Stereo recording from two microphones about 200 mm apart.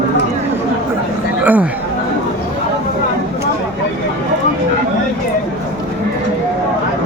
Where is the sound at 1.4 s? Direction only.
5° right (ahead or behind).